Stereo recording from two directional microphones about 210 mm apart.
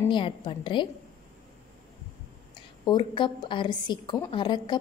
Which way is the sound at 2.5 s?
20° left (ahead or behind).